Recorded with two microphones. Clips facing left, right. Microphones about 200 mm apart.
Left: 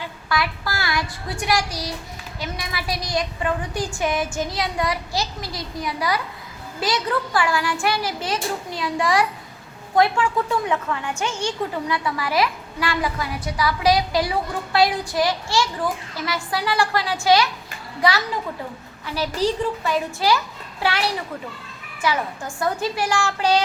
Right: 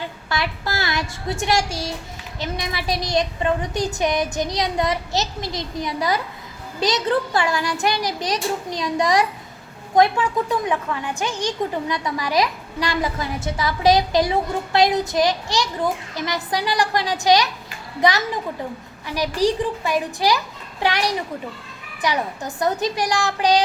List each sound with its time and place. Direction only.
0.3 s a woman's voice: 25° right (ahead or behind)
22.0 s a child's voice: 20° right (ahead or behind)